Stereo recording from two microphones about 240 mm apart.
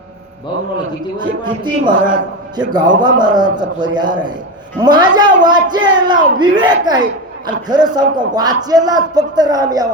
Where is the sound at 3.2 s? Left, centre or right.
Centre.